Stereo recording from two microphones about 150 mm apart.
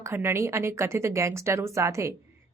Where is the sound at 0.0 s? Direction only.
15° right (ahead or behind).